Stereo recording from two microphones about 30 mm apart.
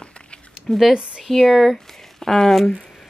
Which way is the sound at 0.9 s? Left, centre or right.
Right.